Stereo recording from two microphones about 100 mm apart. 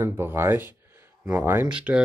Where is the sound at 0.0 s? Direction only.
25° right (ahead or behind).